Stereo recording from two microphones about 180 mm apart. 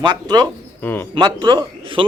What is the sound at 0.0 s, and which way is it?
A man's voice, 25° right (ahead or behind).